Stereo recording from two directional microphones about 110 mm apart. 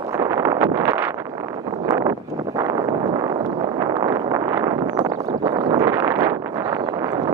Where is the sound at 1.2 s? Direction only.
35° right (ahead or behind).